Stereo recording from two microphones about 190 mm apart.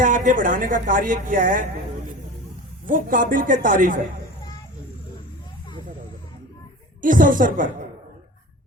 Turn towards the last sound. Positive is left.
turn(degrees=-45)  # may be behind; listen again after turning